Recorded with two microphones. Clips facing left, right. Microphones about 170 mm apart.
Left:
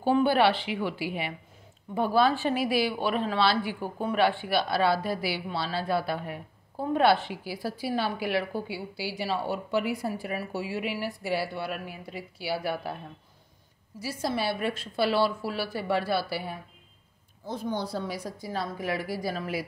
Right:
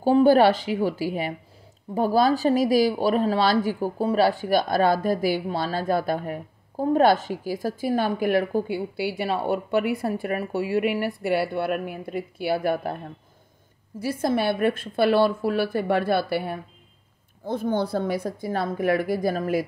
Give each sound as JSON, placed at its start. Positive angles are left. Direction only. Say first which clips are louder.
{"t": 0.0, "sound": "a woman's voice", "louder": "right 6 dB", "side_deg": -40}
{"t": 13.9, "sound": "a woman's voice", "louder": "right 7 dB", "side_deg": -55}